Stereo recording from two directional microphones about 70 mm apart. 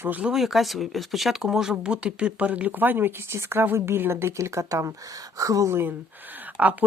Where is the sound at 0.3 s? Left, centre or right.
Centre; by 5.7 s right.